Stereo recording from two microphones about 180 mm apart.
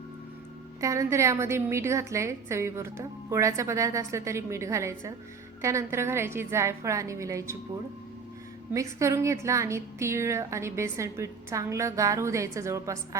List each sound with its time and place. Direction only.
0.8 s a woman's voice: 15° right (ahead or behind)
8.7 s a woman's voice: 15° right (ahead or behind)